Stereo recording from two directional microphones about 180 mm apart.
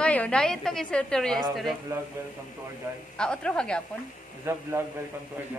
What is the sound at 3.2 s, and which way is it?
Speech, 5° left (ahead or behind).